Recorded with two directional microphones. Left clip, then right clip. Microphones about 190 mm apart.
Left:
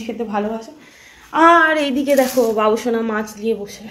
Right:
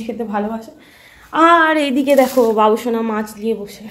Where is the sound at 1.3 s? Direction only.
25° right (ahead or behind); by 3.9 s 5° right (ahead or behind).